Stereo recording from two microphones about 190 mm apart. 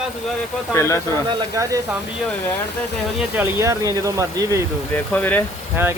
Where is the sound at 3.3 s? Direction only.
15° right (ahead or behind).